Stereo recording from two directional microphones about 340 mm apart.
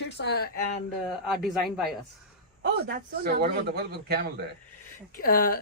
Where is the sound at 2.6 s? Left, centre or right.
Right.